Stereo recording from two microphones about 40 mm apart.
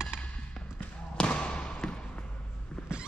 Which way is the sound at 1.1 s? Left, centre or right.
Left.